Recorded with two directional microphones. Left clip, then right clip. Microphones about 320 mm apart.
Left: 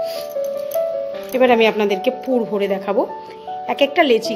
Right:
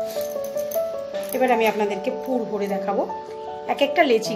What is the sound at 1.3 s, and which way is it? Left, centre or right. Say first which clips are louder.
A woman's voice: left 6 dB; left.